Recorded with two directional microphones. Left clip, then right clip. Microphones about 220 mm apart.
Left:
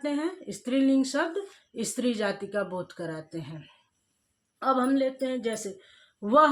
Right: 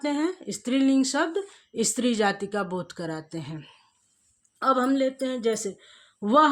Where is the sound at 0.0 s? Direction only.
45° right (ahead or behind).